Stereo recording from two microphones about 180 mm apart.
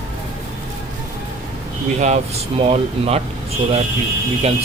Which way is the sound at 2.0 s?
40° right (ahead or behind).